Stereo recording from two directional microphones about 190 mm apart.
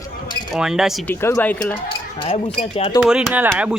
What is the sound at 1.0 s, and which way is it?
Speech, 10° left (ahead or behind).